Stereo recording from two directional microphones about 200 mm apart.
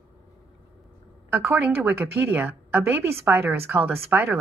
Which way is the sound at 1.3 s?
10° right (ahead or behind).